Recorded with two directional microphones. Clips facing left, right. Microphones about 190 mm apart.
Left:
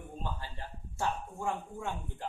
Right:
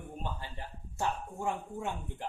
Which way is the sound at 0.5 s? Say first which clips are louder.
Right 1 dB; 20° right (ahead or behind).